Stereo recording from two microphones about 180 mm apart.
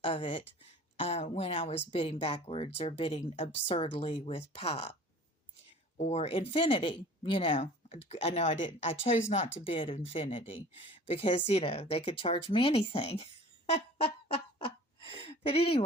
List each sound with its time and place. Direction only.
0.0 s speech: 30° left (ahead or behind)
6.0 s speech: 35° left (ahead or behind)
13.7 s fowl: 35° left (ahead or behind)
15.2 s a sound: 35° left (ahead or behind)